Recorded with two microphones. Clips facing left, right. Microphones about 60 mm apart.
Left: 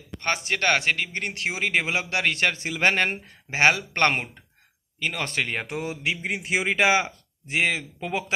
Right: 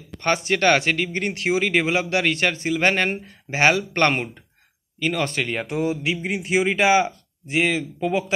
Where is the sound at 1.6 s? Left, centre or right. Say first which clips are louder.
Right 3 dB; right.